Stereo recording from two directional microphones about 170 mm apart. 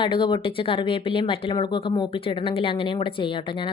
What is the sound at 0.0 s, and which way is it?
Speech, 30° left (ahead or behind).